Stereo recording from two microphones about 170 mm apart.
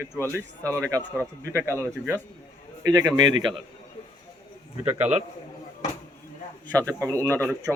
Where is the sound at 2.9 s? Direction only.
25° right (ahead or behind).